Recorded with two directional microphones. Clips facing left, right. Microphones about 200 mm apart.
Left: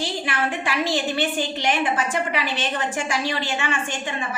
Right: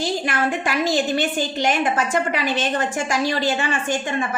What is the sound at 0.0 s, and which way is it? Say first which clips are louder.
A woman's voice: right 4 dB; 45° right (ahead or behind).